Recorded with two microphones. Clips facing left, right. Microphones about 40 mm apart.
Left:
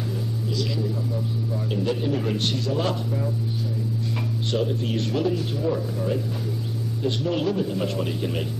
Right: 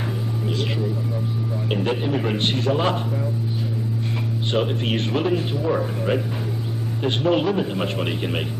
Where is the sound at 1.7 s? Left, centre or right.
Right.